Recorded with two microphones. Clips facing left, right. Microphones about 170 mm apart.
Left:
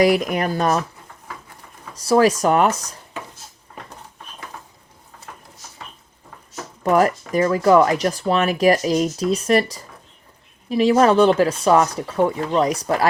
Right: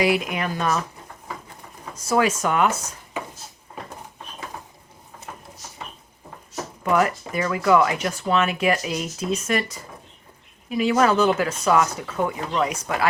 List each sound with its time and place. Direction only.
0.0 s speech: 40° left (ahead or behind)
2.0 s speech: 35° left (ahead or behind)
6.8 s speech: 35° left (ahead or behind)